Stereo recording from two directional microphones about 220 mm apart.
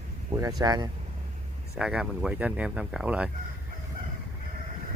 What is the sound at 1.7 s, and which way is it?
Speech, 5° right (ahead or behind).